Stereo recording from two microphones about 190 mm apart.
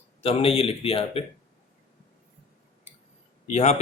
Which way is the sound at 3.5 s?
35° left (ahead or behind).